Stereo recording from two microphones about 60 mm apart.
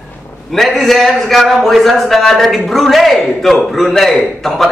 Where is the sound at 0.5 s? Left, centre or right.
Centre.